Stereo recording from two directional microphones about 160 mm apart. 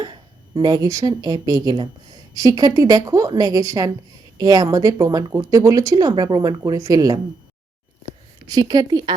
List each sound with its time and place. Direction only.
0.0 s speech: 30° right (ahead or behind)
8.4 s speech: 25° right (ahead or behind)